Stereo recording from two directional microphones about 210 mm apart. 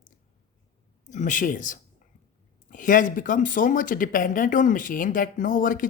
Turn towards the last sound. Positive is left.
turn(degrees=40)  # may be behind; listen again after turning